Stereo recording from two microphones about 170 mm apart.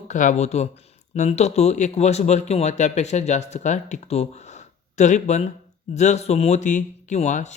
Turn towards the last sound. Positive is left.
turn(degrees=45)  # may be behind; listen again after turning